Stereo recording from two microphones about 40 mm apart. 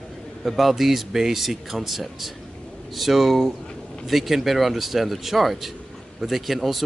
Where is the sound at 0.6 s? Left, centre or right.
Centre.